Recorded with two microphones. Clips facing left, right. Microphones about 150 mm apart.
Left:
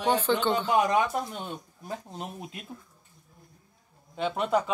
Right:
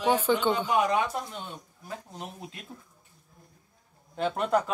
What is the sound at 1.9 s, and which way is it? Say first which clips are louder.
Speech: left 3 dB; 25° left (ahead or behind).